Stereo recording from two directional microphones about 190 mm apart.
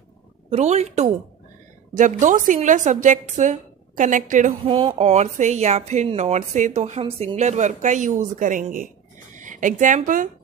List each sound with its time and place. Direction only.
0.5 s speech: 35° right (ahead or behind)
4.6 s speech: 25° right (ahead or behind); by 10.3 s 45° right (ahead or behind)